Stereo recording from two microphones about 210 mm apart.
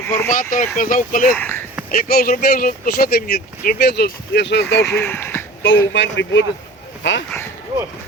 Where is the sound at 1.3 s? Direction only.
10° left (ahead or behind).